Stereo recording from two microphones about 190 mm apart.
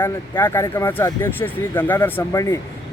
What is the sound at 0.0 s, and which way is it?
Speech, 10° left (ahead or behind).